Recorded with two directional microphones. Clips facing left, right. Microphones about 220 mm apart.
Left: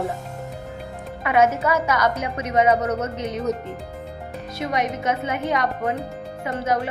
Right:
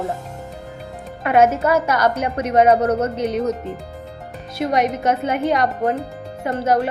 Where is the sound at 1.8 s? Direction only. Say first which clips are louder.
Right 3 dB; 30° right (ahead or behind).